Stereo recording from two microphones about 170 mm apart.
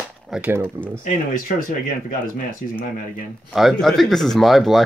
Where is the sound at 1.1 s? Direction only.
55° left (ahead or behind).